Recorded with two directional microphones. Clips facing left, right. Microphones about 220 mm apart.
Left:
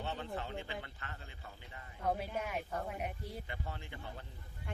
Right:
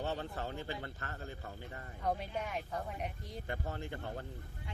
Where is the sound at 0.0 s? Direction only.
40° right (ahead or behind).